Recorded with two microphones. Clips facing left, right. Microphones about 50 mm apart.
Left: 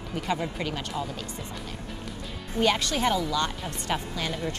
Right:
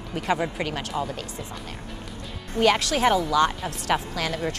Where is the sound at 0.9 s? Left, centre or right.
Right.